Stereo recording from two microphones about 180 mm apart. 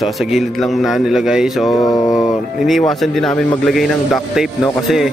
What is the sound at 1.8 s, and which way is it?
Mantra, 20° left (ahead or behind).